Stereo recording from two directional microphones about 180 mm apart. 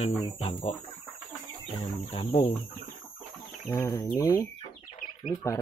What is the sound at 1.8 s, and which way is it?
Speech, 35° left (ahead or behind).